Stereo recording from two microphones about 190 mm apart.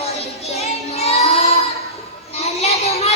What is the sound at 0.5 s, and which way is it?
Child singing, 35° left (ahead or behind).